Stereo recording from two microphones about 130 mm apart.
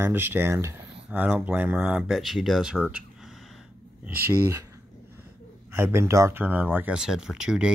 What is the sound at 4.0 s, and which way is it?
Speech, 15° right (ahead or behind).